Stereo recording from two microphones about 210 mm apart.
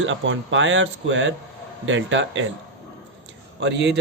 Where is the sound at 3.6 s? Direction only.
55° right (ahead or behind).